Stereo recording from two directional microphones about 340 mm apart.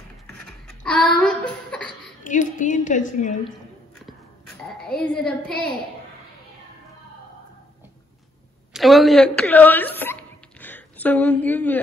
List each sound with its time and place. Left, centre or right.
0.3 s a sound: centre
2.2 s a woman's voice: left
4.8 s a woman's voice: centre
8.7 s a woman's voice: centre